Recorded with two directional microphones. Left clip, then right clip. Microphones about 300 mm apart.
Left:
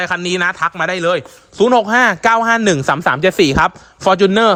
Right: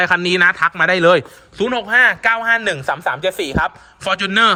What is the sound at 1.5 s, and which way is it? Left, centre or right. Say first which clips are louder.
Speech: left 4 dB; centre.